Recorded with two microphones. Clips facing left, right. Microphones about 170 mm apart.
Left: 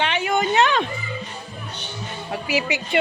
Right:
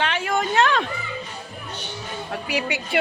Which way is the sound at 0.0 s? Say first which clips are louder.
Left 2 dB; centre (ahead or behind).